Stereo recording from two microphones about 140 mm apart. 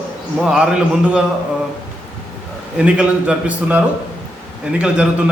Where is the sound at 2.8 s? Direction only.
10° right (ahead or behind).